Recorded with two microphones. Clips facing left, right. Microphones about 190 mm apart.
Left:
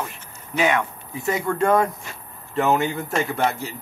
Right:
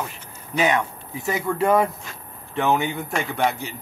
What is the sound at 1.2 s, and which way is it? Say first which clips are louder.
Speech: left 1 dB; 5° right (ahead or behind).